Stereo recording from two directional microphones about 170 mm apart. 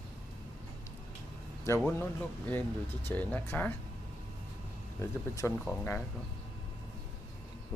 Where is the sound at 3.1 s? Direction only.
10° left (ahead or behind).